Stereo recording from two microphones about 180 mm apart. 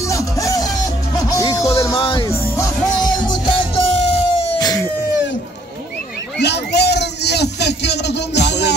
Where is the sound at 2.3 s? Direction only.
15° left (ahead or behind).